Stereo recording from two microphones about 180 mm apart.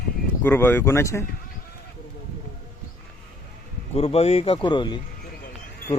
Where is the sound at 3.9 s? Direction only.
35° left (ahead or behind).